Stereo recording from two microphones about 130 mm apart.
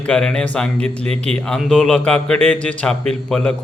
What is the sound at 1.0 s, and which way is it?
Speech, 55° right (ahead or behind).